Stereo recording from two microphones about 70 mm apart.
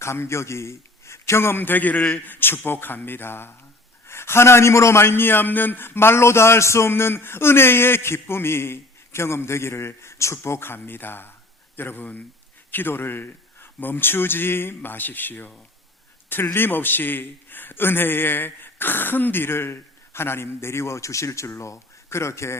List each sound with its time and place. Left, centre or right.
0.0 s a man's voice: left